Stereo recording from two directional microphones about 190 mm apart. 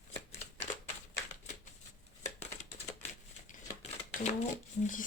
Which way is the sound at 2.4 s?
35° left (ahead or behind).